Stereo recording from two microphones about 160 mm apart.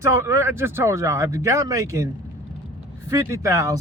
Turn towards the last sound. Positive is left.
turn(degrees=-20)  # may be behind; listen again after turning